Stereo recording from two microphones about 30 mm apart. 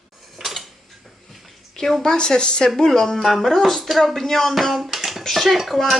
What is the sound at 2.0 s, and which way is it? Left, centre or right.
Speech, left.